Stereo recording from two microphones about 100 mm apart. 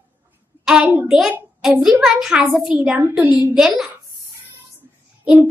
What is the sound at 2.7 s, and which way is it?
Speech, 15° right (ahead or behind).